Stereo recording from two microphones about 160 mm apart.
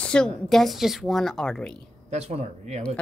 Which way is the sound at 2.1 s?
40° right (ahead or behind).